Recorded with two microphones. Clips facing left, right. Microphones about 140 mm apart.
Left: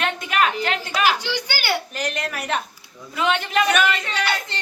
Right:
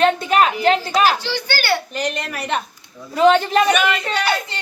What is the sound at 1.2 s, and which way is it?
Speech, 15° left (ahead or behind).